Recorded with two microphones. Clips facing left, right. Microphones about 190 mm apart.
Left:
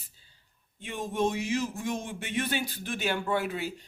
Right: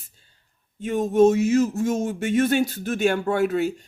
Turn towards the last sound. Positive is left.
turn(degrees=-45)  # may be behind; listen again after turning